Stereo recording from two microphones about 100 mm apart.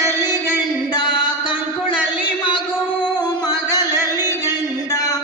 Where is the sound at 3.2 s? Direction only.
45° left (ahead or behind).